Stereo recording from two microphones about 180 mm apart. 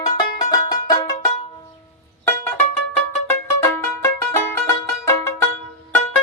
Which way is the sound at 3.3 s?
15° left (ahead or behind).